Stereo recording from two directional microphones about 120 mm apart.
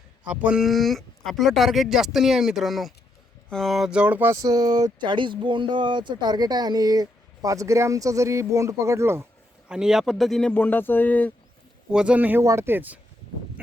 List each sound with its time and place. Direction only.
0.3 s speech: 10° right (ahead or behind)
0.6 s speech: centre (ahead or behind); by 9.2 s 20° right (ahead or behind)
9.6 s speech: 5° right (ahead or behind)
10.5 s speech: 15° left (ahead or behind)
11.9 s speech: 10° right (ahead or behind)
12.4 s speech: 25° right (ahead or behind)